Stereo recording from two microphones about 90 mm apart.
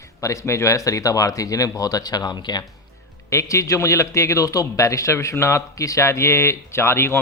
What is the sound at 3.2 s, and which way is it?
A man's voice, 35° left (ahead or behind).